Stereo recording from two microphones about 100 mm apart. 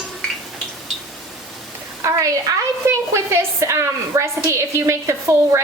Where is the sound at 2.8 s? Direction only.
25° right (ahead or behind).